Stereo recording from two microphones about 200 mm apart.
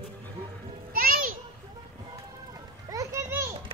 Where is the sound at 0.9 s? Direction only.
45° right (ahead or behind).